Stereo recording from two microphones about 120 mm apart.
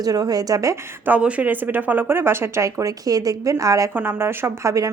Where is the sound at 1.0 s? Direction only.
10° right (ahead or behind); by 4.9 s 25° right (ahead or behind).